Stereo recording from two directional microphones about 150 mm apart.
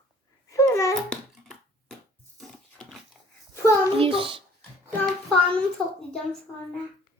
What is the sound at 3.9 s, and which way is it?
Speech, 35° right (ahead or behind).